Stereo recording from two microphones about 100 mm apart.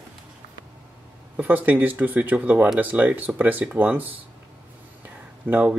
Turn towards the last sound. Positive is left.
turn(degrees=-15)  # may be behind; listen again after turning